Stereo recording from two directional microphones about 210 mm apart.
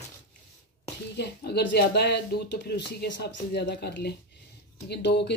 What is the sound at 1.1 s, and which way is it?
Speech, 50° left (ahead or behind).